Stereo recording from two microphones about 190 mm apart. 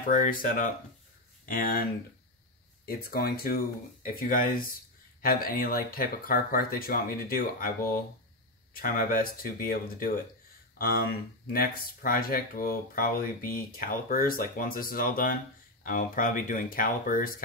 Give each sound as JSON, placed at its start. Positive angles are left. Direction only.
{"t": 0.0, "sound": "speech", "side_deg": 45}